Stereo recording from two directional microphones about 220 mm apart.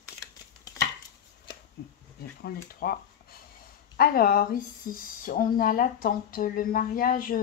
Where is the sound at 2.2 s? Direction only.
45° left (ahead or behind).